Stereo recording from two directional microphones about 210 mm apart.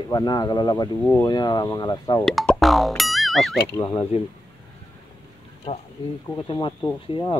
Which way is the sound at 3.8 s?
20° left (ahead or behind).